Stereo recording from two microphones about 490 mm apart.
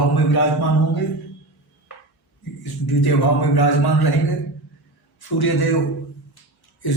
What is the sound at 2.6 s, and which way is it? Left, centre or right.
Speech, left.